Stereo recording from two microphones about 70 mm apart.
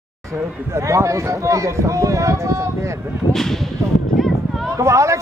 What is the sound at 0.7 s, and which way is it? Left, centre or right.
A man's voice, right.